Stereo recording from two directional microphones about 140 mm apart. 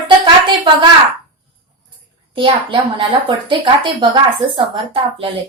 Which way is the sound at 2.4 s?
35° right (ahead or behind).